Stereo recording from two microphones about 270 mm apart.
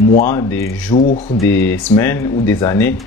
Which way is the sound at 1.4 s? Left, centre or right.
Centre.